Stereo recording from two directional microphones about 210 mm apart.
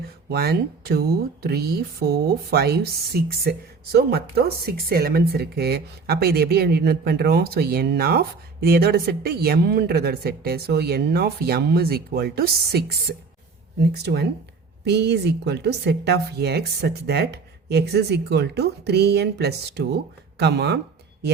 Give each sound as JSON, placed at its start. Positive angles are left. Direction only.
{"t": 0.3, "sound": "speech", "side_deg": -50}